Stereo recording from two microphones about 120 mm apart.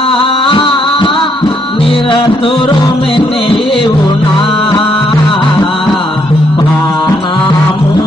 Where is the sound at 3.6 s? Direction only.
50° left (ahead or behind).